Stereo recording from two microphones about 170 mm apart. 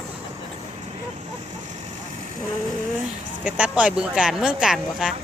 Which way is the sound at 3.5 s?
5° right (ahead or behind).